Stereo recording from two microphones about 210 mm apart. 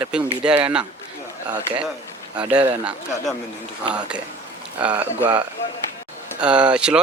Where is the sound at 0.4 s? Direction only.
5° right (ahead or behind).